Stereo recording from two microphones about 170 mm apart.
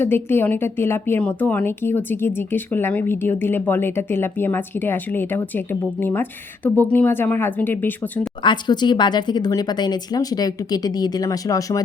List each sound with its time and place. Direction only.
0.0 s a woman's voice: 15° left (ahead or behind)
8.4 s speech: 25° left (ahead or behind)